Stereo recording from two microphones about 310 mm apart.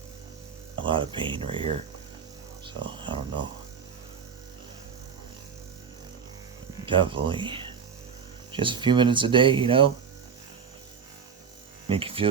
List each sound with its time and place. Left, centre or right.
0.8 s speech: centre
6.8 s speech: centre
11.9 s speech: centre